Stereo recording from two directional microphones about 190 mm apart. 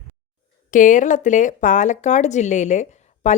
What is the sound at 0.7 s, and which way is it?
Speech, 45° left (ahead or behind).